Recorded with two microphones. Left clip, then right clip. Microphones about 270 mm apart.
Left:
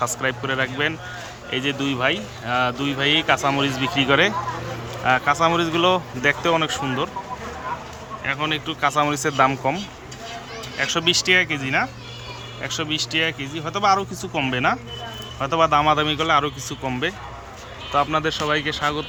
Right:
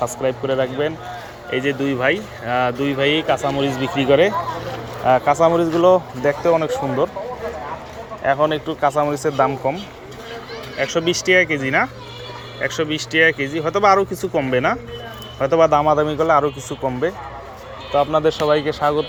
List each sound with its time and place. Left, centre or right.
0.0 s speech: centre
6.2 s speech: centre
6.7 s speech: centre
8.2 s speech: centre
8.9 s speech: centre
10.8 s speech: centre